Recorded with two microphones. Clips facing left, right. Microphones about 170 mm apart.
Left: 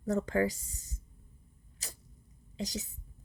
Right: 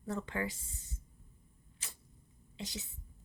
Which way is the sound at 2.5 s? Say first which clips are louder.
Left 7 dB; 40° left (ahead or behind).